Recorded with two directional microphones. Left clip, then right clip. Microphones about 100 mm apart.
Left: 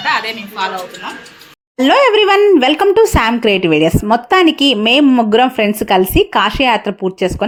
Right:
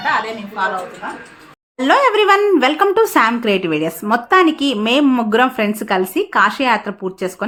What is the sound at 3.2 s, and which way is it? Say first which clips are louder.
A woman's voice: left 2 dB; 65° left (ahead or behind).